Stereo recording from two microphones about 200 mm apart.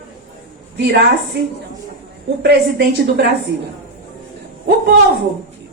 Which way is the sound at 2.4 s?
55° right (ahead or behind).